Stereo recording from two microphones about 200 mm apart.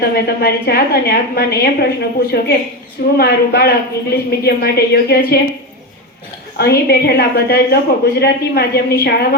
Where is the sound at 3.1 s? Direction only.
50° left (ahead or behind).